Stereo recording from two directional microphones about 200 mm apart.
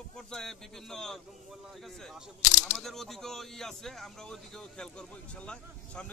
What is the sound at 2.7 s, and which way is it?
Speech, centre (ahead or behind).